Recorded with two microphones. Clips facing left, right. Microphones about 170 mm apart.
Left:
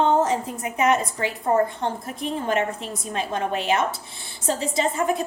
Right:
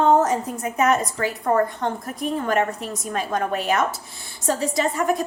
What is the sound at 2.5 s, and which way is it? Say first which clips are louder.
Speech: right 1 dB; 45° right (ahead or behind).